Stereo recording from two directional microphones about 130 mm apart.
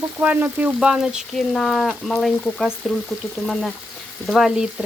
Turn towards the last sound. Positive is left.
turn(degrees=-5)  # may be behind; listen again after turning